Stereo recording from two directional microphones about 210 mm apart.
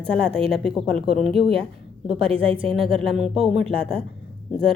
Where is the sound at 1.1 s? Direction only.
Centre (ahead or behind).